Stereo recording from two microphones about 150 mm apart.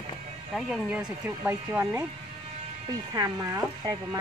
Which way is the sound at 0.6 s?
5° right (ahead or behind).